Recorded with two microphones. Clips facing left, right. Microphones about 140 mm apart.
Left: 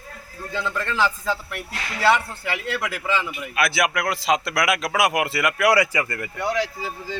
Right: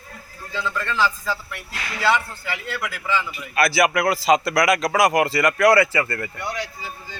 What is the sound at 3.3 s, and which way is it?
A man's voice, centre (ahead or behind).